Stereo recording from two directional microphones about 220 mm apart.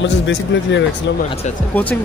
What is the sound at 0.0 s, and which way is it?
A man's voice, 55° left (ahead or behind).